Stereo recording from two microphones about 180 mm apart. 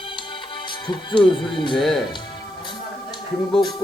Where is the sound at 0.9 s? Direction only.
25° left (ahead or behind).